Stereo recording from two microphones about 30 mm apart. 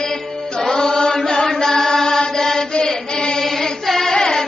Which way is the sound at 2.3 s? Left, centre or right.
Centre.